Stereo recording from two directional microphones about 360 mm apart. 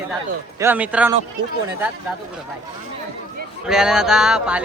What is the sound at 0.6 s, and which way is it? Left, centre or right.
Speech, centre.